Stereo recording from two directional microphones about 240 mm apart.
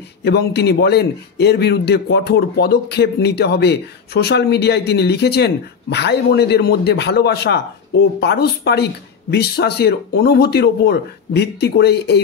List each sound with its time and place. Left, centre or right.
0.2 s a man's voice: left